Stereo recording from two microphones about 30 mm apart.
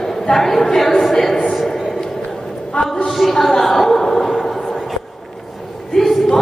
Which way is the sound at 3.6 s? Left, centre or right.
Centre.